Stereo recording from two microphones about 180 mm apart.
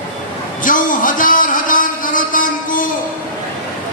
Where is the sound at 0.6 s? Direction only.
50° left (ahead or behind).